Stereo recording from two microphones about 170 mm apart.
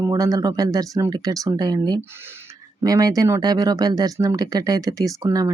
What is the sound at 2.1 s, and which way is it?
Speech, 15° right (ahead or behind).